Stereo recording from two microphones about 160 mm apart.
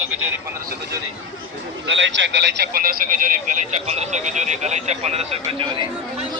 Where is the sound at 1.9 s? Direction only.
90° right; by 5.8 s 35° right (ahead or behind).